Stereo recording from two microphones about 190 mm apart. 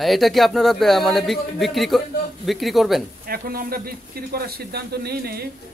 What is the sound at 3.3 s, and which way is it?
Speech, 50° right (ahead or behind).